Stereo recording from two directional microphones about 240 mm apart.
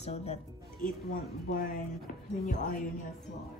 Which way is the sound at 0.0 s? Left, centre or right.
Left.